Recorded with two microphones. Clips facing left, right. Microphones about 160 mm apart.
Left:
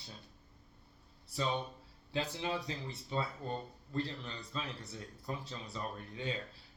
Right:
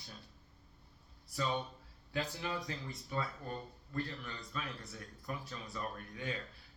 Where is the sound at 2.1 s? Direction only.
25° left (ahead or behind).